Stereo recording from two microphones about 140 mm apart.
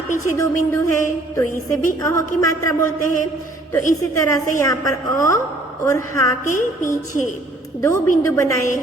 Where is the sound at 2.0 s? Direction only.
25° left (ahead or behind).